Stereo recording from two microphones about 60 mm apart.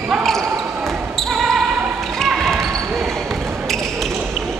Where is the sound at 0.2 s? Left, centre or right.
Centre.